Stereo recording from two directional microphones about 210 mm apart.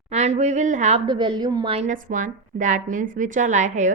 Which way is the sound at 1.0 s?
20° right (ahead or behind).